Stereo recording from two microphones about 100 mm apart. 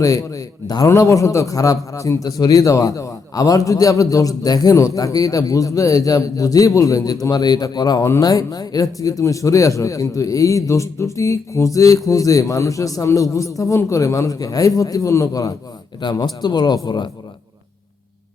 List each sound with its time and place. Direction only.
0.0 s a man's voice: 35° left (ahead or behind)
16.0 s speech: 45° left (ahead or behind)